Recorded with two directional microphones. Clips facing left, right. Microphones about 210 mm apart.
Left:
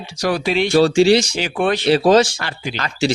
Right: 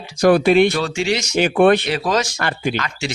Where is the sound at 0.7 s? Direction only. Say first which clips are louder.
Left 8 dB; 30° left (ahead or behind).